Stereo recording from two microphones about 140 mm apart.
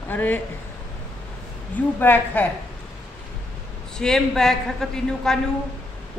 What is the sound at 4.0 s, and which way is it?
A man's voice, 5° left (ahead or behind).